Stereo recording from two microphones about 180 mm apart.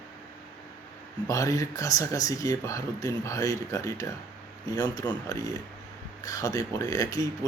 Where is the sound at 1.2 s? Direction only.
15° left (ahead or behind).